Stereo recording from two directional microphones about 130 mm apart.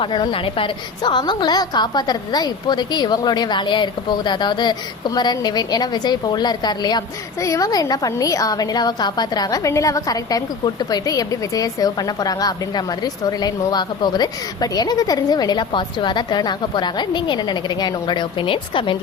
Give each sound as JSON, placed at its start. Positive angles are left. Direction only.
{"t": 0.0, "sound": "a woman's voice", "side_deg": 40}